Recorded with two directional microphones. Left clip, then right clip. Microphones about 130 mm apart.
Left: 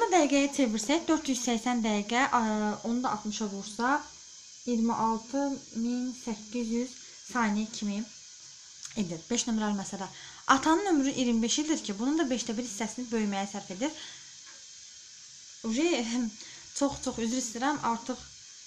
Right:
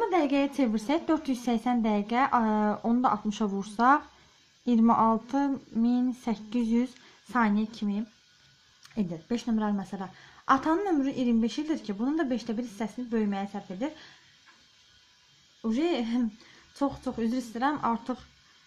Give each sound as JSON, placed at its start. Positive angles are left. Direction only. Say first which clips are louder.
{"t": 0.0, "sound": "a woman's voice", "louder": "left 1 dB", "side_deg": -10}
{"t": 3.3, "sound": "speech", "louder": "right 4 dB", "side_deg": -45}
{"t": 7.3, "sound": "a woman's voice", "louder": "right 3 dB", "side_deg": -25}
{"t": 15.7, "sound": "speech", "louder": "even", "side_deg": -25}